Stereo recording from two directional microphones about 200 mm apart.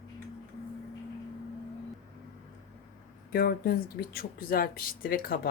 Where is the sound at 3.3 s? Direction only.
50° left (ahead or behind).